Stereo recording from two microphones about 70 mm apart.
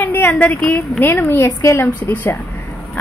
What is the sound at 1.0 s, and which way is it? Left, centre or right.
Speech, left.